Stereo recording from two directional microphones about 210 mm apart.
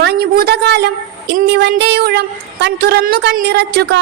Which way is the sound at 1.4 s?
50° right (ahead or behind).